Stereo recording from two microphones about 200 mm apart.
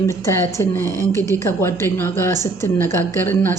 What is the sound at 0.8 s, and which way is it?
Speech, 15° right (ahead or behind).